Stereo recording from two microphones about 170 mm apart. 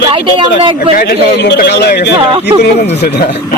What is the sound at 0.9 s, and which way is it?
A man's voice, 65° left (ahead or behind).